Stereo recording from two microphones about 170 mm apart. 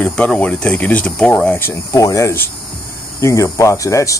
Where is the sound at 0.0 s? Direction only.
10° left (ahead or behind).